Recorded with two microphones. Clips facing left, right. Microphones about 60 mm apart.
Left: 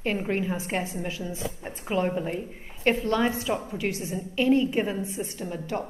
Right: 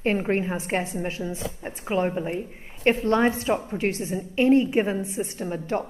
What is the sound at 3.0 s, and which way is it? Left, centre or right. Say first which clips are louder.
A woman's voice: right 4 dB; right.